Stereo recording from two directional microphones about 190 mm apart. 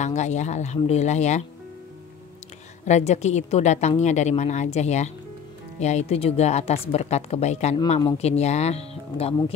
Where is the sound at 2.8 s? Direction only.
35° left (ahead or behind).